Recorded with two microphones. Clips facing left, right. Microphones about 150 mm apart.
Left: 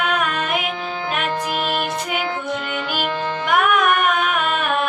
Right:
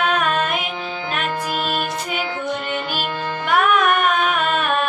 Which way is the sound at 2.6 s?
35° right (ahead or behind).